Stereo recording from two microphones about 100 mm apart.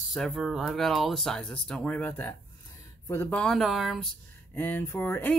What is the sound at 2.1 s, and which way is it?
Speech, 25° left (ahead or behind).